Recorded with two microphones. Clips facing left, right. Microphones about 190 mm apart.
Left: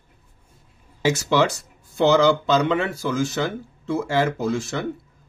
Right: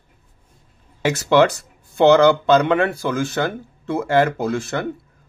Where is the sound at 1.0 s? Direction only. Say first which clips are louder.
Right 4 dB; 60° right (ahead or behind).